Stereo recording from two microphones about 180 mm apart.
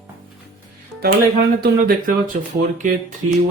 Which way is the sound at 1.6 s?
50° right (ahead or behind).